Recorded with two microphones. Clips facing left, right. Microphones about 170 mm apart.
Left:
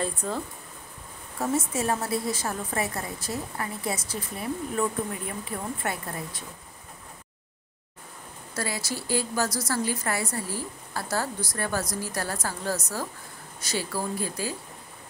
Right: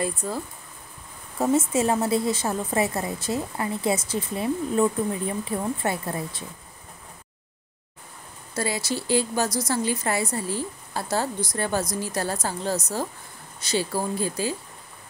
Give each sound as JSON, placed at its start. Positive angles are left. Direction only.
{"t": 0.0, "sound": "speech", "side_deg": -10}
{"t": 1.4, "sound": "a woman's voice", "side_deg": -20}
{"t": 8.5, "sound": "a woman's voice", "side_deg": -20}